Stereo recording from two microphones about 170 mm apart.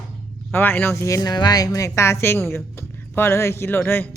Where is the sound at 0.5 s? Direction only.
10° left (ahead or behind).